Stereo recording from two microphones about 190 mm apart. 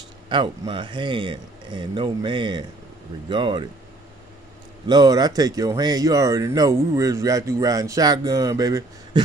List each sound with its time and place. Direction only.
0.3 s speech: 25° right (ahead or behind)
4.8 s speech: 20° right (ahead or behind)